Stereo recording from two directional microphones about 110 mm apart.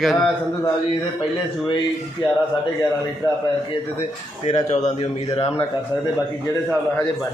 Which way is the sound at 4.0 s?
90° left.